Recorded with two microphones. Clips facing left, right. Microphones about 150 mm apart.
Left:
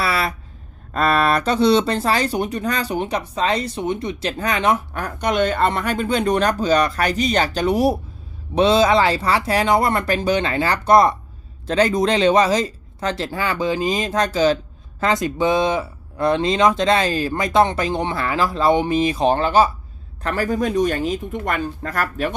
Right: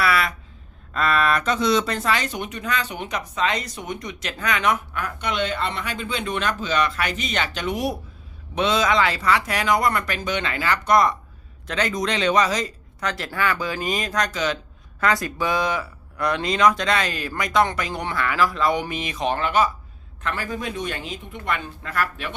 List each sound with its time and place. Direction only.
0.0 s a sound: 30° left (ahead or behind)
0.9 s speech: 40° left (ahead or behind)
15.0 s speech: 20° left (ahead or behind); by 22.4 s 40° left (ahead or behind)